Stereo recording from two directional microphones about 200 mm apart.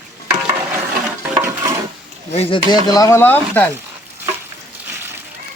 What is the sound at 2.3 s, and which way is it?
Speech, 25° left (ahead or behind).